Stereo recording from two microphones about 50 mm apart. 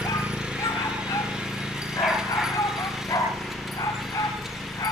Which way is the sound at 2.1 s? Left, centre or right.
Centre.